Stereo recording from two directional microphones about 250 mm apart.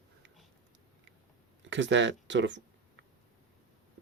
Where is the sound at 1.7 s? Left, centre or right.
Right.